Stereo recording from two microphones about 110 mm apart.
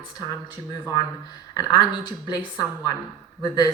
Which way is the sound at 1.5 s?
40° left (ahead or behind).